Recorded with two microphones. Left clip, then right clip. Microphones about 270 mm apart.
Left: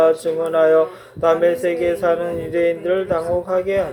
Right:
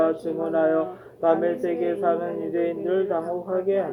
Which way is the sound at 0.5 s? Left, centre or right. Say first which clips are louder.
Left 8 dB; left.